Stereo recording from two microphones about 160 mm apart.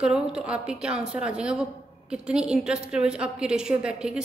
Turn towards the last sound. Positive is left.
turn(degrees=-5)  # may be behind; listen again after turning